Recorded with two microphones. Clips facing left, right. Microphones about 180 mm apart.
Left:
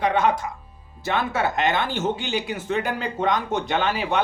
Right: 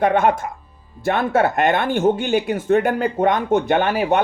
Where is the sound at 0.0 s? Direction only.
55° right (ahead or behind).